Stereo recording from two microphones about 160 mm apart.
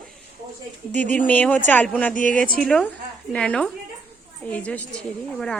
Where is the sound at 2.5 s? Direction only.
5° left (ahead or behind).